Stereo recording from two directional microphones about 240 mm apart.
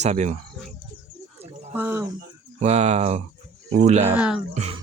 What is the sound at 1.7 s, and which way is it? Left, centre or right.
Speech, centre.